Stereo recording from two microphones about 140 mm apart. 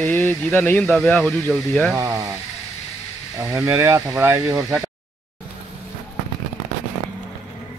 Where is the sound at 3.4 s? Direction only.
20° right (ahead or behind).